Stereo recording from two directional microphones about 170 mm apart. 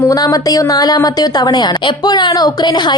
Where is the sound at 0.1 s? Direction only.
20° left (ahead or behind).